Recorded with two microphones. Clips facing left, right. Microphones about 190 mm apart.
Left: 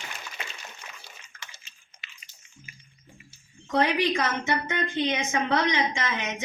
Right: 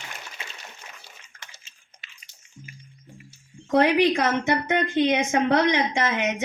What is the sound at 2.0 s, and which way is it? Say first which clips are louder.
Chewing: left 2 dB; 45° right (ahead or behind).